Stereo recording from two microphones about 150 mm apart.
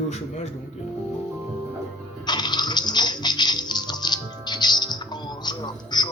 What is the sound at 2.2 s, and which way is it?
Music, 30° left (ahead or behind).